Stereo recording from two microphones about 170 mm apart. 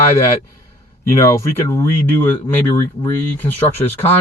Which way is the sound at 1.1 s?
15° left (ahead or behind).